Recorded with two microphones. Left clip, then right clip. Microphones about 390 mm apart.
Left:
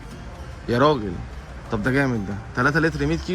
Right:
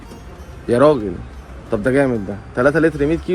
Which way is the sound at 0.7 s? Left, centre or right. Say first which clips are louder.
Right 6 dB; right.